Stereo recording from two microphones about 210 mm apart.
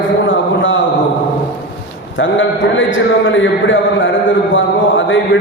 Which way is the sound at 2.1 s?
65° left (ahead or behind).